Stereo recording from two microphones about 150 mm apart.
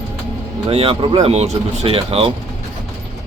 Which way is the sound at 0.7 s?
40° right (ahead or behind).